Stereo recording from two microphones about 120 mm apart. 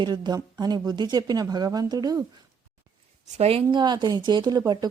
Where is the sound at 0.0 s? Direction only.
35° right (ahead or behind).